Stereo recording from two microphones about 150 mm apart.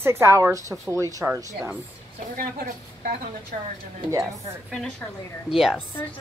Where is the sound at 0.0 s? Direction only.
15° right (ahead or behind).